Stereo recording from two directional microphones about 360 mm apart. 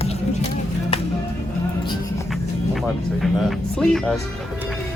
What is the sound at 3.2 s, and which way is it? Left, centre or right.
Speech, centre.